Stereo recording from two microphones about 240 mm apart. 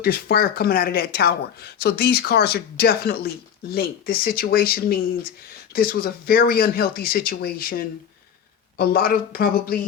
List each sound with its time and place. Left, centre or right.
0.0 s speech: left